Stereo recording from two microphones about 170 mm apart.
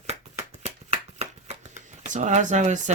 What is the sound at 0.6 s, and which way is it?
Shuffling cards, 40° right (ahead or behind).